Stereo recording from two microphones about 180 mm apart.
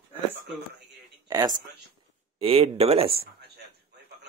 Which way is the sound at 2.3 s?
30° right (ahead or behind).